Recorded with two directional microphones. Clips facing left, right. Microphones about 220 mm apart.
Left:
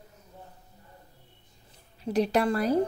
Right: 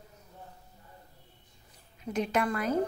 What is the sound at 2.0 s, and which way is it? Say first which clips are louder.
Speech: left 5 dB; 35° left (ahead or behind).